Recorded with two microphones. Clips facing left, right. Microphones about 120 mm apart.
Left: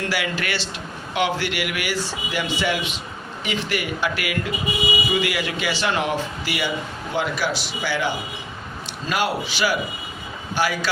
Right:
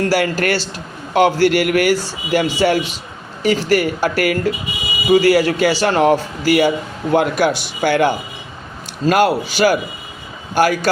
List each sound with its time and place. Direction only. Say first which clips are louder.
0.1 s a man's voice: right 9 dB; 40° right (ahead or behind)